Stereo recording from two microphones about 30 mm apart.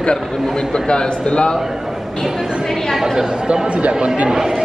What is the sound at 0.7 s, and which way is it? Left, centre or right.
Speech, left.